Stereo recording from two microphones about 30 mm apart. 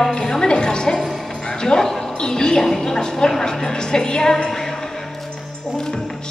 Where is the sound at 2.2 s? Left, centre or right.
Left.